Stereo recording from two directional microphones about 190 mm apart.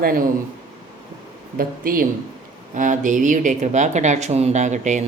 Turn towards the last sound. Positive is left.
turn(degrees=-40)  # may be behind; listen again after turning